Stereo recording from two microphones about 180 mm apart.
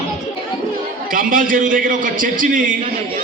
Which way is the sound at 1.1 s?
50° right (ahead or behind).